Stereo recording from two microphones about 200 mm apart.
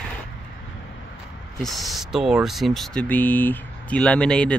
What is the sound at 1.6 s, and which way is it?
Speech, centre (ahead or behind).